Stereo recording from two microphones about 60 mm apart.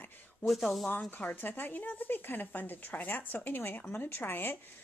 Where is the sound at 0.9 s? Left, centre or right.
Left.